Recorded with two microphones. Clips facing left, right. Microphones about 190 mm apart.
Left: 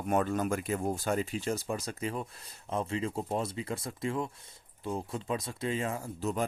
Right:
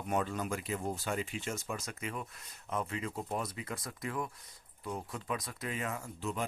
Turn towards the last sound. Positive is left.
turn(degrees=40)  # may be behind; listen again after turning